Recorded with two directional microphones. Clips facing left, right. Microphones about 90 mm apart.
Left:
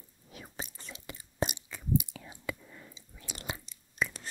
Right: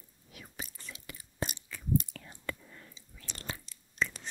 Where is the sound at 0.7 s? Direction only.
20° left (ahead or behind).